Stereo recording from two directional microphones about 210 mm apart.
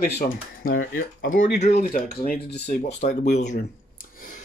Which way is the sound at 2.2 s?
50° left (ahead or behind).